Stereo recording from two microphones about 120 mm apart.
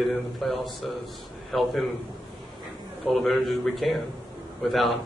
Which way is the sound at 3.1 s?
Centre (ahead or behind).